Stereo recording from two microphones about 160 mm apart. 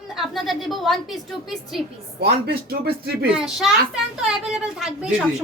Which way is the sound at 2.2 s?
75° right (ahead or behind).